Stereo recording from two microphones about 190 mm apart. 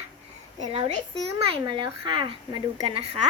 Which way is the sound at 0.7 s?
35° right (ahead or behind).